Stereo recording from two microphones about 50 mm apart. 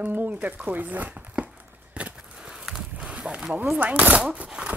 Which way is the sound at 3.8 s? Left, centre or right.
Right.